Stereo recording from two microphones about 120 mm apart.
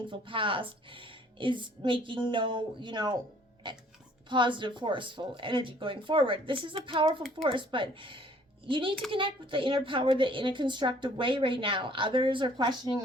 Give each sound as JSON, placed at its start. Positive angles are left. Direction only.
{"t": 0.0, "sound": "a woman's voice", "side_deg": -45}
{"t": 4.3, "sound": "a woman's voice", "side_deg": -40}